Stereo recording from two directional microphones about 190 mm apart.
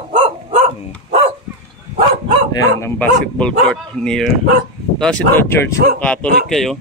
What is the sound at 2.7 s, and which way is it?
Speech, 10° left (ahead or behind).